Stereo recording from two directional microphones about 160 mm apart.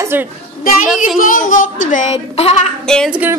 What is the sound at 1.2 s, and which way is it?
A child's voice, 55° left (ahead or behind).